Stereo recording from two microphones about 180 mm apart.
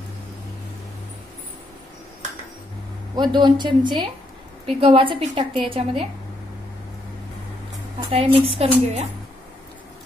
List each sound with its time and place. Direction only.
3.2 s a woman's voice: 25° right (ahead or behind)
8.1 s a woman's voice: 30° right (ahead or behind)